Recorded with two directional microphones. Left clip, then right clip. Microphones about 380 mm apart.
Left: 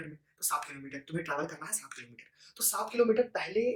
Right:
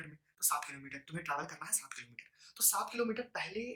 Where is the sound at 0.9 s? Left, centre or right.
Centre.